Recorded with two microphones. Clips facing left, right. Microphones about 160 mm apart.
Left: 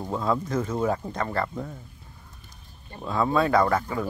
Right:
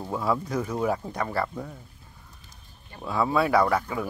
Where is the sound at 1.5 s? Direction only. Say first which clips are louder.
Left 2 dB; centre (ahead or behind).